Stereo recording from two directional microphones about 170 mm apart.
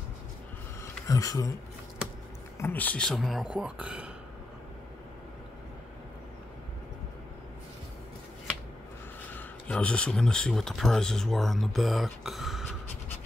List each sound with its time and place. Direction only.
1.0 s speech: 20° left (ahead or behind)
2.6 s speech: 10° left (ahead or behind); by 4.1 s 5° right (ahead or behind)
9.3 s speech: 10° left (ahead or behind)